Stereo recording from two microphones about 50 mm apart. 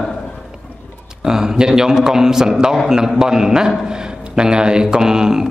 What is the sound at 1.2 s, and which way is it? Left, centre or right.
Speech, centre.